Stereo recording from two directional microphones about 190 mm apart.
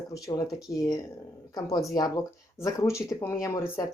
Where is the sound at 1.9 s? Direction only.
20° left (ahead or behind).